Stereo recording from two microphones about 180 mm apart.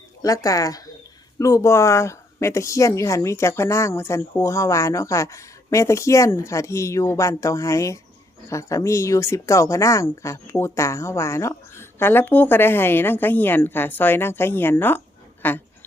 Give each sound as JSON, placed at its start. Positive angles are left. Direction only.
{"t": 0.2, "sound": "speech", "side_deg": 20}